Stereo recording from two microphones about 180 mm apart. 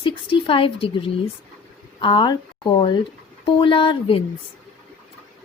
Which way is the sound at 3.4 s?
30° left (ahead or behind).